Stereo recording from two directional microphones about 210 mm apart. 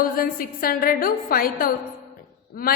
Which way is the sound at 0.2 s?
45° left (ahead or behind).